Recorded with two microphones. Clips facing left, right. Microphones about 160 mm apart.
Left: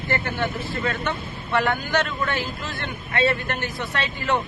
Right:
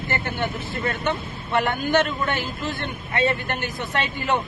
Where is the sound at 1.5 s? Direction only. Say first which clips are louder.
Right 2 dB; 20° right (ahead or behind).